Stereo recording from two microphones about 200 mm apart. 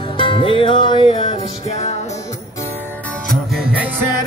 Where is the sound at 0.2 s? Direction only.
25° left (ahead or behind).